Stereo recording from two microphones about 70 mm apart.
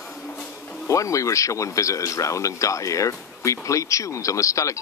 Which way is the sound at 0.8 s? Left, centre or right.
Left.